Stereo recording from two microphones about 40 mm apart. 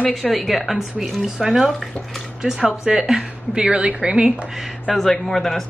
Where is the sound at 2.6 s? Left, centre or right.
Right.